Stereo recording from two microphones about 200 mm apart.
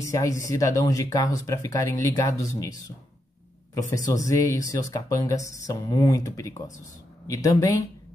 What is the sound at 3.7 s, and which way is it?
Speech, 15° left (ahead or behind).